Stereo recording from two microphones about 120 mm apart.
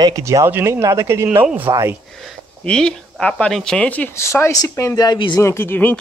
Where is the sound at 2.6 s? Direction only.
5° left (ahead or behind); by 5.4 s 35° left (ahead or behind).